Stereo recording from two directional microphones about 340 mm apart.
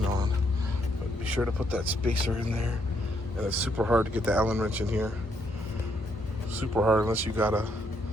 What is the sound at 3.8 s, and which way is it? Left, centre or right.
Speech, centre.